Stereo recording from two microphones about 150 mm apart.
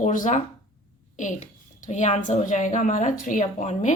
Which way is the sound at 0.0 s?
60° left (ahead or behind).